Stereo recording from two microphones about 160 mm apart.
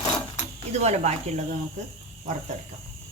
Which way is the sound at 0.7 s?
45° right (ahead or behind).